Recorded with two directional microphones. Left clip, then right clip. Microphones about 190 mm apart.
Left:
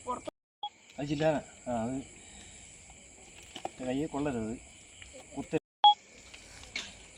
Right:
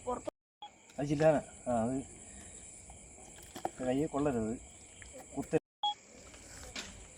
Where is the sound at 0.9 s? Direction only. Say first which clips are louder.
Right 2 dB; 10° right (ahead or behind).